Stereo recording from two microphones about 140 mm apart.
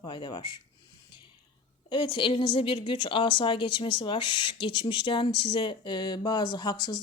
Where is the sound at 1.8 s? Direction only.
35° left (ahead or behind).